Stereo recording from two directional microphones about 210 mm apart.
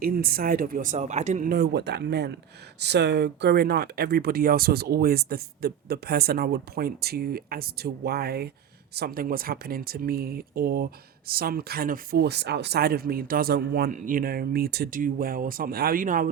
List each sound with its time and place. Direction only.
0.0 s speech: 45° right (ahead or behind)